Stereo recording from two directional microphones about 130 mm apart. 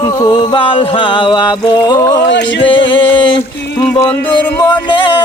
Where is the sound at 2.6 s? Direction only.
40° left (ahead or behind).